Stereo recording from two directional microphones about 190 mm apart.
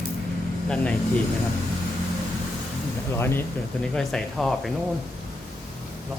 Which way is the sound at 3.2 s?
10° left (ahead or behind).